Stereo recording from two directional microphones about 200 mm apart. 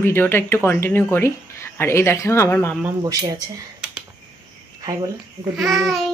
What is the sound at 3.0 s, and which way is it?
Speech, 20° right (ahead or behind).